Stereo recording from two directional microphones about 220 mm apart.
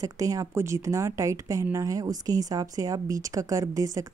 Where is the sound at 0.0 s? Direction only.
15° right (ahead or behind).